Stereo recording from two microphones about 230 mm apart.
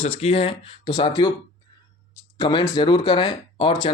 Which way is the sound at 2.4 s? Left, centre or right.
Centre.